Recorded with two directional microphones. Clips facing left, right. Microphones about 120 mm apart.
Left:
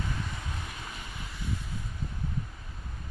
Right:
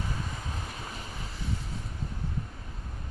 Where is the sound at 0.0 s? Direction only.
30° right (ahead or behind).